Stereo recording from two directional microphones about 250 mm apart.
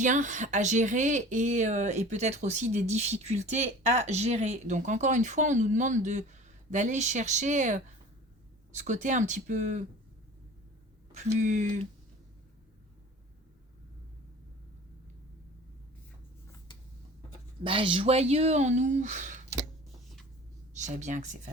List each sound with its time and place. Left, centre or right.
0.0 s speech: right
8.8 s speech: right
11.1 s speech: right
17.6 s speech: right
20.7 s speech: right